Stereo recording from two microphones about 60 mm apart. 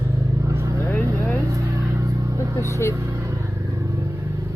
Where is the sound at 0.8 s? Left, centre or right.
Left.